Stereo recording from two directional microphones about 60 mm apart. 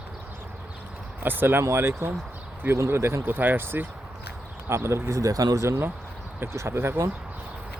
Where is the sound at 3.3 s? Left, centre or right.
Right.